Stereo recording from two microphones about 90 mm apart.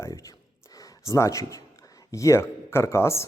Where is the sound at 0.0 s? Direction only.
40° left (ahead or behind).